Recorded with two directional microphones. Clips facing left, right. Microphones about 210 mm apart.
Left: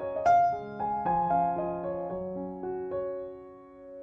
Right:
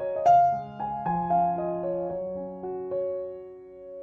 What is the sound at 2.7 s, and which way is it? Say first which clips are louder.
Music: right 4 dB; centre (ahead or behind).